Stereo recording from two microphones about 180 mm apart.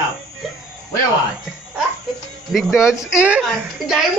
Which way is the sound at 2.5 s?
Centre (ahead or behind).